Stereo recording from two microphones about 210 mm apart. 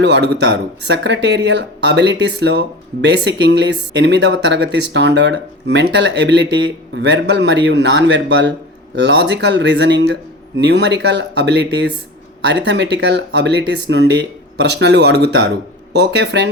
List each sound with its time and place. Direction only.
0.0 s speech: 55° right (ahead or behind)